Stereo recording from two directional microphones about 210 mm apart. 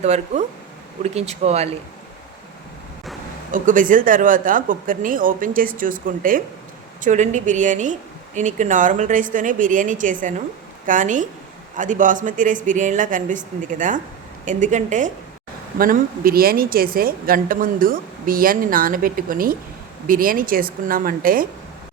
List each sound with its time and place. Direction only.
0.0 s speech: 30° right (ahead or behind)
3.5 s speech: 40° right (ahead or behind)